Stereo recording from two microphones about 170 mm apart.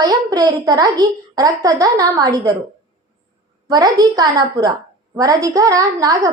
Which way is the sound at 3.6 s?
20° right (ahead or behind).